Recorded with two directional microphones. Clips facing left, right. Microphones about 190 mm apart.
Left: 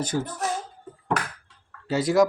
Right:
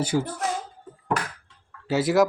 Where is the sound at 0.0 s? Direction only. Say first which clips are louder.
Right 3 dB; 10° right (ahead or behind).